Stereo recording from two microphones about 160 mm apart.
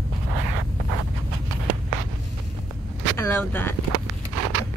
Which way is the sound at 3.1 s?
15° left (ahead or behind).